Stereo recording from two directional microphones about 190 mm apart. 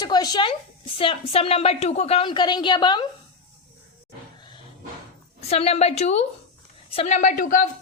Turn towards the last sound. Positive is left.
turn(degrees=45)  # may be behind; listen again after turning